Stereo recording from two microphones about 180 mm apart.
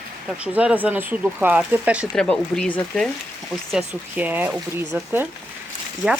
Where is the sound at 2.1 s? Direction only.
5° left (ahead or behind).